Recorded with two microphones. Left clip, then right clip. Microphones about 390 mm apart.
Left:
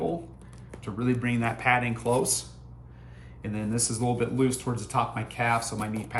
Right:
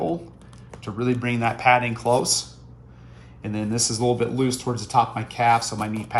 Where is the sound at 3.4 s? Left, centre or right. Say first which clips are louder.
Right 6 dB; centre.